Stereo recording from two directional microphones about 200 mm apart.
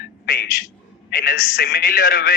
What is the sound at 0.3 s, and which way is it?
A man's voice, 50° left (ahead or behind).